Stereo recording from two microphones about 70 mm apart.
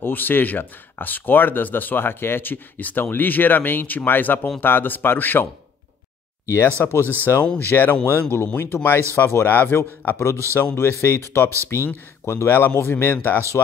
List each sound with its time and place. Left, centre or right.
0.0 s speech: left
6.4 s speech: left
7.5 s speech: left